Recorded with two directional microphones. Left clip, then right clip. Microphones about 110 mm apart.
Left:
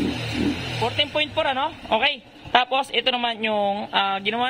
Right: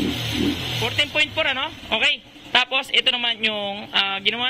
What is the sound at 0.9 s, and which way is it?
A woman's voice, 30° left (ahead or behind).